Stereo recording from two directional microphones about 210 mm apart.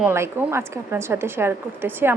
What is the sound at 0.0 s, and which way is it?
A woman's voice, 10° right (ahead or behind).